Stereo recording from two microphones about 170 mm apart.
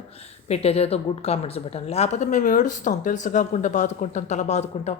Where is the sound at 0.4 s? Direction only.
40° left (ahead or behind).